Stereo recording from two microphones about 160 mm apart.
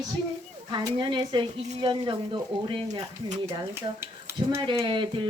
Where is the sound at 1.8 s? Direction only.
30° right (ahead or behind).